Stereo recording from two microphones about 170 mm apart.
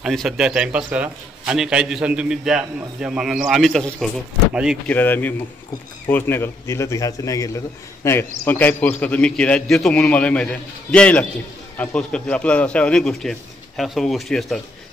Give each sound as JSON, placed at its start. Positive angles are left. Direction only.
{"t": 0.0, "sound": "a man's voice", "side_deg": 0}